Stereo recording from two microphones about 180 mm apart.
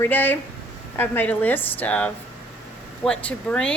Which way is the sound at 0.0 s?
10° left (ahead or behind).